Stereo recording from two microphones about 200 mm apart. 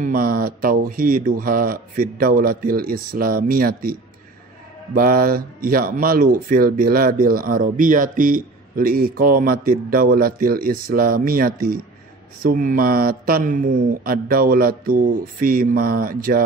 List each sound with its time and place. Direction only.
0.0 s speech: 45° right (ahead or behind)
4.9 s speech: 45° right (ahead or behind)